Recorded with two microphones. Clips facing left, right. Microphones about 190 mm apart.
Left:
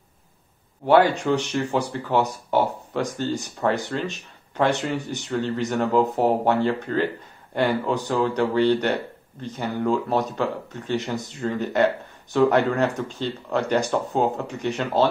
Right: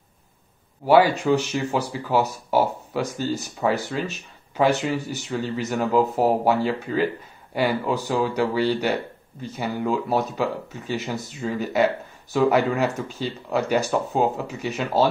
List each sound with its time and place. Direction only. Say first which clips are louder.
0.8 s speech: right 1 dB; 5° right (ahead or behind)